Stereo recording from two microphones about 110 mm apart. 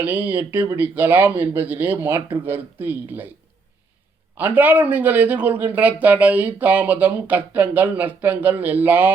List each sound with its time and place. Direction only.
0.0 s a man's voice: 15° right (ahead or behind)
4.4 s a man's voice: 15° right (ahead or behind)